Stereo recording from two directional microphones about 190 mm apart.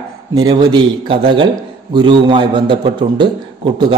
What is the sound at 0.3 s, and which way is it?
A man's voice, 20° right (ahead or behind).